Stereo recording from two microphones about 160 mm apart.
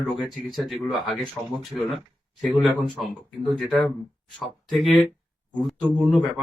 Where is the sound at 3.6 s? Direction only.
5° left (ahead or behind).